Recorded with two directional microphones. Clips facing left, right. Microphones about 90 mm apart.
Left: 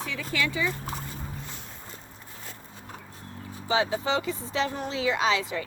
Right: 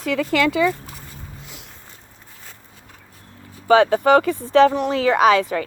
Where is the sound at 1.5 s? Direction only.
90° right.